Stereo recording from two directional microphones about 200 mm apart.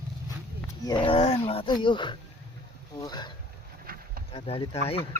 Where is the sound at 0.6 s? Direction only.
20° left (ahead or behind).